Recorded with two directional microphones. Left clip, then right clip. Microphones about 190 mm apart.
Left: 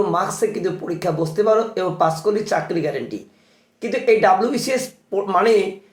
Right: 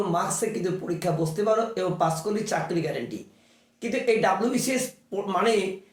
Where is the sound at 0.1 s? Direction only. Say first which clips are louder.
Left 6 dB; 10° left (ahead or behind).